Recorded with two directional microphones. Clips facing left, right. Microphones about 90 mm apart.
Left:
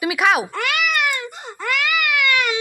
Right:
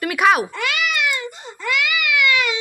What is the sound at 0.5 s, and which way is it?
Baby cry, 50° left (ahead or behind).